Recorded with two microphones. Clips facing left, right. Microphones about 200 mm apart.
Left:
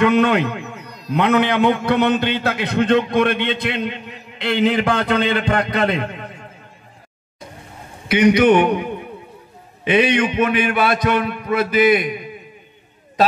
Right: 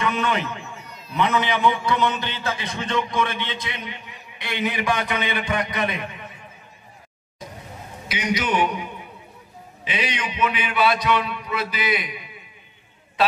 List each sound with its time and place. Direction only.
0.0 s a man's voice: 60° left (ahead or behind)
0.8 s a sound: 40° left (ahead or behind)
1.1 s a man's voice: 60° left (ahead or behind)
8.1 s a man's voice: 60° left (ahead or behind)